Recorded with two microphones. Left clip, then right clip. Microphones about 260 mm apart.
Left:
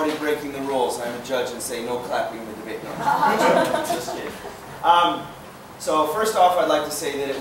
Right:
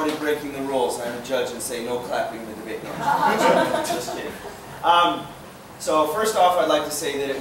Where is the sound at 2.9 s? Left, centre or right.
Centre.